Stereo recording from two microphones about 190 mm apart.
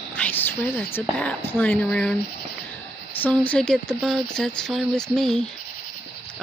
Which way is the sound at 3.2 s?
5° left (ahead or behind).